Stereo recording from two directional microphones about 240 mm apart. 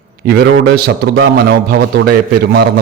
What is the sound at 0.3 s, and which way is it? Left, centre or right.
A man's voice, right.